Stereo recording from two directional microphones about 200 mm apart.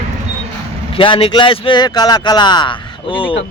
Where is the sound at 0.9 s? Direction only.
25° left (ahead or behind).